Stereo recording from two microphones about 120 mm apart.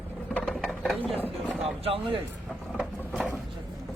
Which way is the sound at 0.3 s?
5° left (ahead or behind).